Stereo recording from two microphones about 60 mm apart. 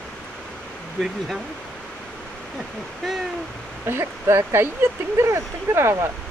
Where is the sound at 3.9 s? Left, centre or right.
Right.